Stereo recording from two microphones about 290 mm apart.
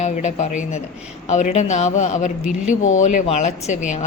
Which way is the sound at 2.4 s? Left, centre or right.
Left.